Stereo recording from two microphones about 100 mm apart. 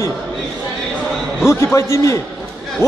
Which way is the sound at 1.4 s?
25° left (ahead or behind).